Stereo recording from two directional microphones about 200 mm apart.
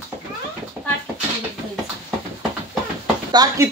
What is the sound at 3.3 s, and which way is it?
Speech, 20° right (ahead or behind).